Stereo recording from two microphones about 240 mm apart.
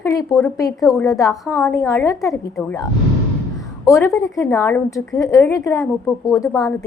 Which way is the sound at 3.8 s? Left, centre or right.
Centre.